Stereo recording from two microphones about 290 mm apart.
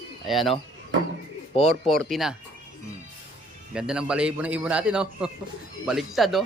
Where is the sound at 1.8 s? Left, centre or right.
Centre.